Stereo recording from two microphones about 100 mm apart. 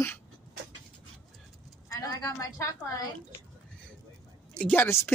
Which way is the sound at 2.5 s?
30° left (ahead or behind).